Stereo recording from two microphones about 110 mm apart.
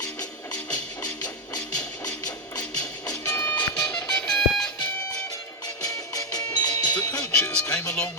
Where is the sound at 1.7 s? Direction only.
35° left (ahead or behind).